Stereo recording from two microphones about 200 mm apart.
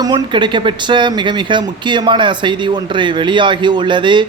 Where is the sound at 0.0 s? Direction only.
20° right (ahead or behind).